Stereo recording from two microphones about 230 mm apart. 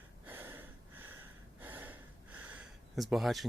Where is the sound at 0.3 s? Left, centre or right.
Centre.